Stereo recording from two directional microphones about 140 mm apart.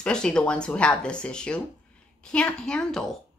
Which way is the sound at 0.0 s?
5° left (ahead or behind).